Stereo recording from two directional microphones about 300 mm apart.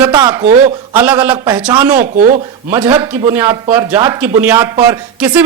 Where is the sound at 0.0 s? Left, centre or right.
Centre.